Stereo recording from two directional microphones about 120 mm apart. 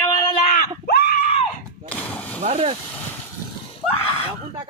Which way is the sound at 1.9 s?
10° left (ahead or behind).